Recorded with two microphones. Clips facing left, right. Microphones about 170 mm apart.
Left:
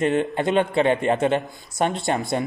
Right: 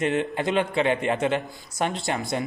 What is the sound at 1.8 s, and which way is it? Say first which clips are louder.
Speech: left 4 dB; 20° left (ahead or behind).